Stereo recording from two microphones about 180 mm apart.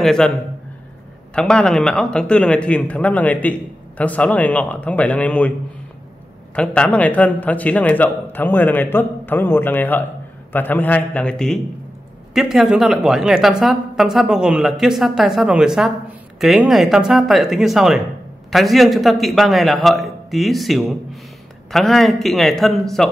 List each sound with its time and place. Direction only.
0.0 s a woman's voice: 5° left (ahead or behind)
1.3 s a woman's voice: 5° left (ahead or behind)
6.5 s a man's voice: 5° left (ahead or behind)